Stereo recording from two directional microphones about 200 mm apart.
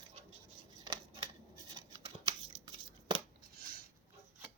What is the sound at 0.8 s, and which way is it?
Scissors, 20° right (ahead or behind).